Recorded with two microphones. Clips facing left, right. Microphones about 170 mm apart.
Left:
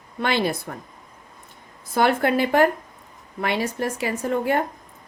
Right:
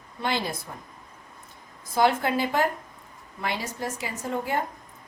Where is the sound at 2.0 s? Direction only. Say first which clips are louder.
Left 3 dB; 65° left (ahead or behind).